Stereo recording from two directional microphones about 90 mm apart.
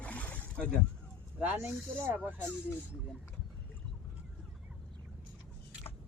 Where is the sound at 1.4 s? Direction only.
20° right (ahead or behind).